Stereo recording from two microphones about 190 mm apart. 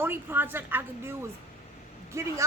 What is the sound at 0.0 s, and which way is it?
A woman's voice, 10° right (ahead or behind).